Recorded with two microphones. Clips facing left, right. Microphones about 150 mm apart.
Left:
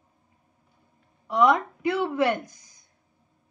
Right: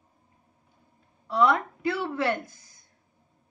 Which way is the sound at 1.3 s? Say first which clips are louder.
Left 2 dB; 15° left (ahead or behind).